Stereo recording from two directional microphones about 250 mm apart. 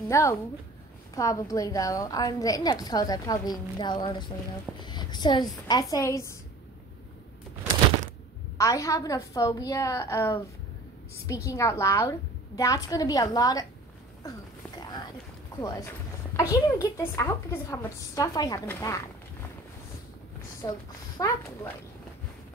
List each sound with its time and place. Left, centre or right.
0.1 s a woman's voice: centre
8.5 s a woman's voice: centre
15.6 s a woman's voice: centre
20.6 s a woman's voice: centre